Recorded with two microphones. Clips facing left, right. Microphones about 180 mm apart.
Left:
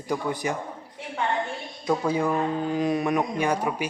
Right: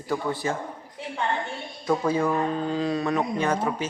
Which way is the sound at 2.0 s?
15° left (ahead or behind).